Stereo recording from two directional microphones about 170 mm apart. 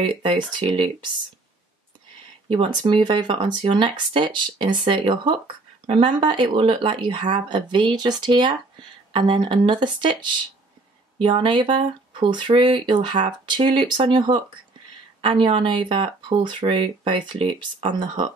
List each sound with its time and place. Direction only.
0.0 s speech: 30° right (ahead or behind)
2.5 s speech: 30° right (ahead or behind)